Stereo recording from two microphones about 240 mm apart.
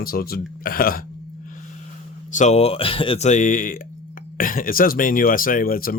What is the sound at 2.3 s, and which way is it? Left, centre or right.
Speech, left.